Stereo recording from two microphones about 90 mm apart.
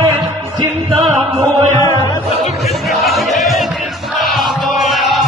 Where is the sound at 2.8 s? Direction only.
Centre (ahead or behind).